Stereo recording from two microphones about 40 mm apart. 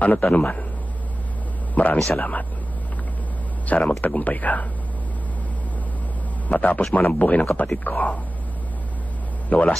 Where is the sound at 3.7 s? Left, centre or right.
Left.